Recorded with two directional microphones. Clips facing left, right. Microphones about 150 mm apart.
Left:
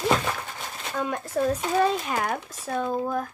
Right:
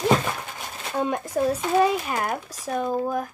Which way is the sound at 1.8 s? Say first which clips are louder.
Right 3 dB; 5° right (ahead or behind).